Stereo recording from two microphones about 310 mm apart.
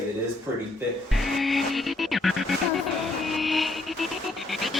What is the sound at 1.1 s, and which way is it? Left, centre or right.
Music, centre.